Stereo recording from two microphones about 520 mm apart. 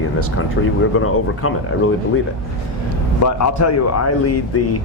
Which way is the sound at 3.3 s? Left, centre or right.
Left.